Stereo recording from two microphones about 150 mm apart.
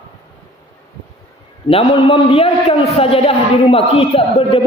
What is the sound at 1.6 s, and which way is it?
A man's voice, 40° left (ahead or behind).